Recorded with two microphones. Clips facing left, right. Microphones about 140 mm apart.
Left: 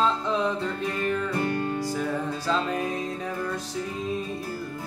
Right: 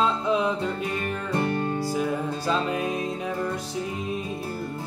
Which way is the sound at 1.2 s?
25° right (ahead or behind).